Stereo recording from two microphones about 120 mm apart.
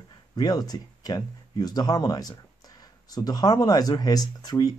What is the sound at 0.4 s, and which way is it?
Speech, 35° left (ahead or behind).